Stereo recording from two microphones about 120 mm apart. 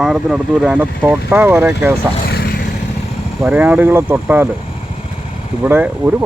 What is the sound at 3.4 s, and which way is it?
Speech, 10° right (ahead or behind).